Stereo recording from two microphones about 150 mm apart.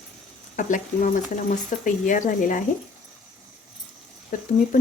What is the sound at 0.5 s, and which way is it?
Speech, 60° left (ahead or behind).